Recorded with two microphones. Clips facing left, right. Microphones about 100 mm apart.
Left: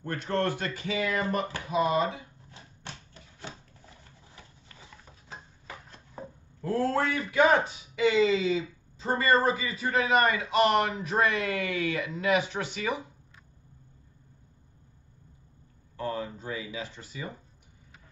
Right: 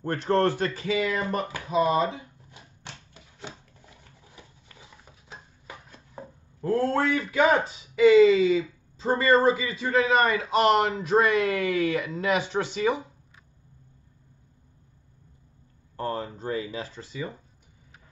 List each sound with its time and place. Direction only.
0.0 s speech: 45° right (ahead or behind)
0.5 s speech: 30° right (ahead or behind)
3.2 s wood: 15° right (ahead or behind)
5.7 s a sound: 15° right (ahead or behind)
6.6 s a man's voice: 30° right (ahead or behind)
8.3 s speech: 30° left (ahead or behind)
9.0 s a man's voice: 30° right (ahead or behind)
16.0 s a man's voice: 40° right (ahead or behind)